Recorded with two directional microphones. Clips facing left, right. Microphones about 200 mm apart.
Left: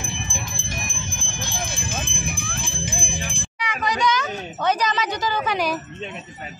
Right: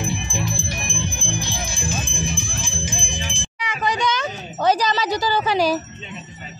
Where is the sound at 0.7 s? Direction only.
45° left (ahead or behind).